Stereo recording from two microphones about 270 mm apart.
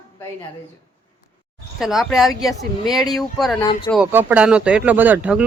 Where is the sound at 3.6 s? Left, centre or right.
Centre.